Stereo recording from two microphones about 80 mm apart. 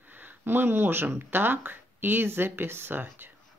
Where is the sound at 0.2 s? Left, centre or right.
Right.